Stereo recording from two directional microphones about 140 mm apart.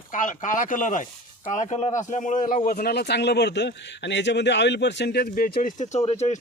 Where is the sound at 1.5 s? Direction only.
55° left (ahead or behind); by 2.9 s 80° left.